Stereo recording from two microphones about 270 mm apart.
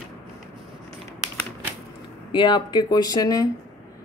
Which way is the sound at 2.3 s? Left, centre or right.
Centre.